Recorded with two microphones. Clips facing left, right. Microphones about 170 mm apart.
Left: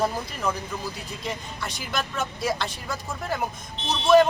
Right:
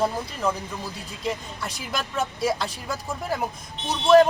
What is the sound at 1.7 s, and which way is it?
Speech, 35° right (ahead or behind).